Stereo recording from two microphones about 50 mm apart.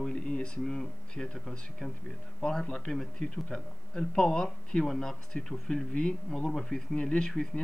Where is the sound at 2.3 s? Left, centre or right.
Centre.